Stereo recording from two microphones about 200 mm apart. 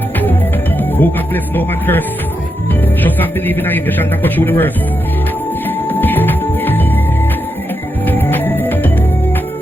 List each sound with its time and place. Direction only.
0.9 s a man's voice: 10° left (ahead or behind)
5.6 s music: 10° left (ahead or behind)
8.0 s music: 10° left (ahead or behind)